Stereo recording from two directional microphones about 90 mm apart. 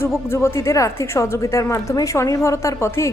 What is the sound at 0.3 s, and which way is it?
A woman's voice, 30° left (ahead or behind).